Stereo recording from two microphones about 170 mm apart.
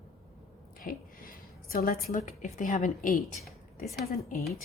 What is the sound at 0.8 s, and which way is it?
A woman's voice, 55° left (ahead or behind).